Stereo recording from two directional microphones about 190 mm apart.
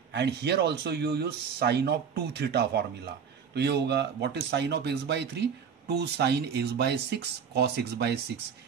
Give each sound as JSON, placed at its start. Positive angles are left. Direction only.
{"t": 0.1, "sound": "a man's voice", "side_deg": -65}